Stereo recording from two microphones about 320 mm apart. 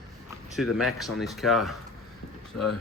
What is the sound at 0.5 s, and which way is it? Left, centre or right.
A man's voice, centre.